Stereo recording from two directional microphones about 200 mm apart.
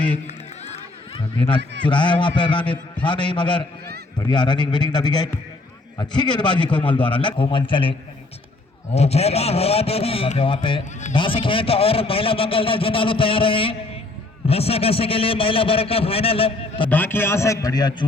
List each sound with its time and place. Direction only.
0.6 s run: 30° left (ahead or behind)
1.9 s a man's voice: 25° left (ahead or behind)
16.9 s a man's voice: 10° left (ahead or behind)